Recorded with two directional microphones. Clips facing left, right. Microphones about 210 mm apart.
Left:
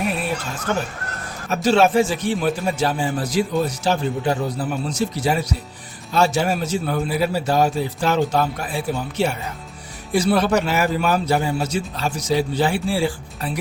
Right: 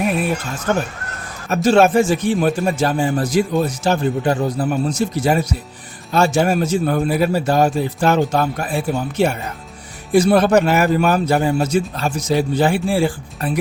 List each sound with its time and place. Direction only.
0.7 s a man's voice: 50° right (ahead or behind)